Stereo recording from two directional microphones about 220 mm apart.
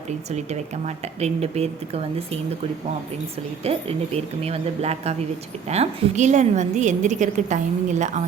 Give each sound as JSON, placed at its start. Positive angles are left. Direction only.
{"t": 0.3, "sound": "speech", "side_deg": -30}
{"t": 3.6, "sound": "a woman's voice", "side_deg": -25}